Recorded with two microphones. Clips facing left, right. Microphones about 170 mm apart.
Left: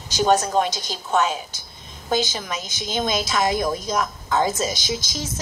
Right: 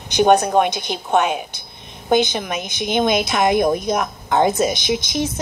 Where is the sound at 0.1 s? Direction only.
60° right (ahead or behind).